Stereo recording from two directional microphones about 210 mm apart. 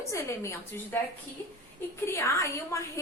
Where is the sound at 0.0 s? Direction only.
15° left (ahead or behind).